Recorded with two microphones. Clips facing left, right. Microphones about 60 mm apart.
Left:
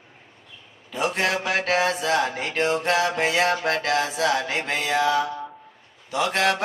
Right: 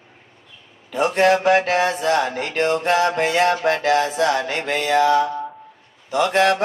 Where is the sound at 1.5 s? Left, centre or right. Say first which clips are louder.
Right 5 dB; right.